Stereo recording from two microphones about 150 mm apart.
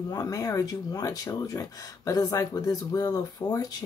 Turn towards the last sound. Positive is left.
turn(degrees=25)  # may be behind; listen again after turning